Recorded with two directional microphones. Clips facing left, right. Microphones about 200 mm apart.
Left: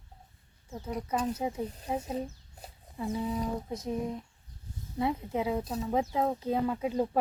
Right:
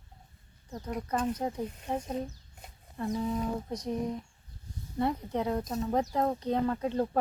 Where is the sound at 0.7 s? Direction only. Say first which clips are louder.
Even; 5° left (ahead or behind).